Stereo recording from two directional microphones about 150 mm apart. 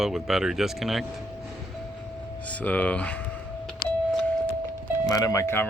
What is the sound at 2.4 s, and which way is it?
Speech, 10° left (ahead or behind).